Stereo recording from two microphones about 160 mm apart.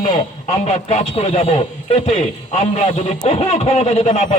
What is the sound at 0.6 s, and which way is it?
Speech, 40° left (ahead or behind).